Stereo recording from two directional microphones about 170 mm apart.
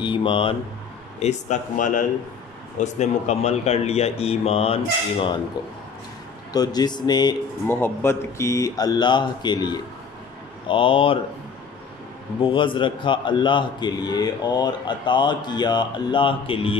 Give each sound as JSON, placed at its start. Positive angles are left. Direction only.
{"t": 0.0, "sound": "a man's voice", "side_deg": 30}
{"t": 1.2, "sound": "speech", "side_deg": 45}
{"t": 6.5, "sound": "a man's voice", "side_deg": 25}
{"t": 7.6, "sound": "a man's voice", "side_deg": 15}
{"t": 12.4, "sound": "a man's voice", "side_deg": 30}